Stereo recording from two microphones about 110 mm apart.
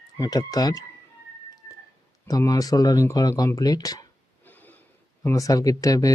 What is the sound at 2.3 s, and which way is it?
Speech, 35° left (ahead or behind).